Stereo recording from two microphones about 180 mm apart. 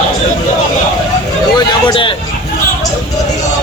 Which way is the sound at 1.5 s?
25° left (ahead or behind).